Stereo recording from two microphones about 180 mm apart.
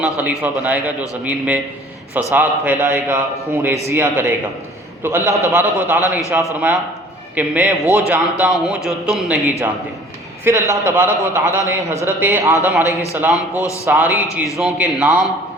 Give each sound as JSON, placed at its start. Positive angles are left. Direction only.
{"t": 0.0, "sound": "a man's voice", "side_deg": -10}
{"t": 7.8, "sound": "a man's voice", "side_deg": 15}
{"t": 8.0, "sound": "a man's voice", "side_deg": -10}
{"t": 10.4, "sound": "a man's voice", "side_deg": -15}
{"t": 12.8, "sound": "a man's voice", "side_deg": 15}
{"t": 13.1, "sound": "a man's voice", "side_deg": -10}
{"t": 13.6, "sound": "a man's voice", "side_deg": 15}
{"t": 13.8, "sound": "a man's voice", "side_deg": -10}